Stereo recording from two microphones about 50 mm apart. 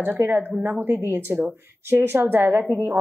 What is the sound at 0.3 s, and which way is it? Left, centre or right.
Speech, right.